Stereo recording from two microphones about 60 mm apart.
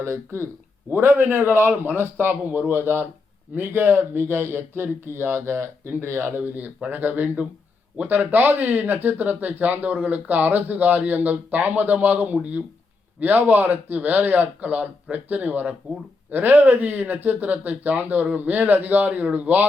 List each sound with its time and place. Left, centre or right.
0.0 s speech: right
0.9 s speech: right